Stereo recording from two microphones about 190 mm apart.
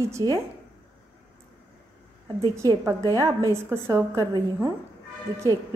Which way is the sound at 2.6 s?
15° right (ahead or behind).